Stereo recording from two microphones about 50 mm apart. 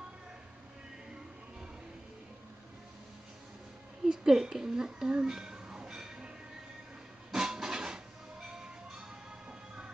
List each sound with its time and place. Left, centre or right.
4.0 s a sound: centre
7.3 s train: centre
9.5 s music: right